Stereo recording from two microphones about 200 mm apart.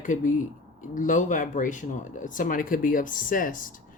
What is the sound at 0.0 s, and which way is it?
Speech, 40° left (ahead or behind).